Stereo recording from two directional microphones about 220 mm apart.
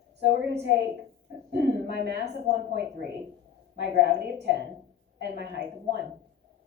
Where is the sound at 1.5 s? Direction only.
50° right (ahead or behind).